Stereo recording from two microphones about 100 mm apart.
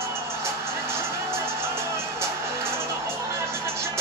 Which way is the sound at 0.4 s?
25° right (ahead or behind).